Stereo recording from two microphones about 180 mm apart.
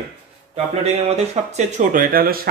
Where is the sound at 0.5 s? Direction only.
35° right (ahead or behind).